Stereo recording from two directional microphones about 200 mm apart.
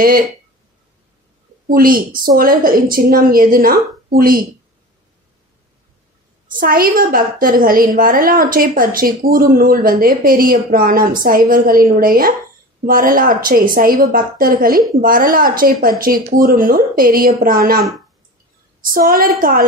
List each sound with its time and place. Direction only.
1.7 s a woman's voice: 45° right (ahead or behind)
6.4 s a woman's voice: 45° right (ahead or behind)